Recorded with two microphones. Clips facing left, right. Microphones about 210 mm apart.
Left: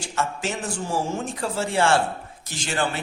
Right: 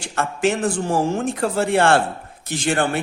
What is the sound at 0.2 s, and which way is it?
A man's voice, 60° right (ahead or behind).